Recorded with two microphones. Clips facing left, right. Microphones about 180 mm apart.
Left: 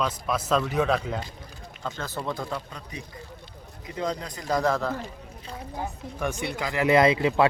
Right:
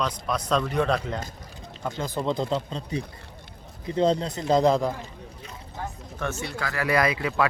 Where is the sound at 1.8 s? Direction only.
15° right (ahead or behind).